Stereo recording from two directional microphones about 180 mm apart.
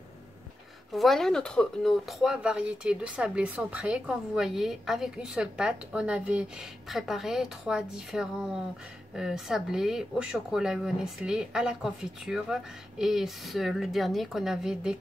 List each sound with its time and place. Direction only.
0.9 s speech: centre (ahead or behind)